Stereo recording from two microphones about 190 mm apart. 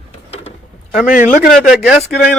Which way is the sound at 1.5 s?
5° right (ahead or behind).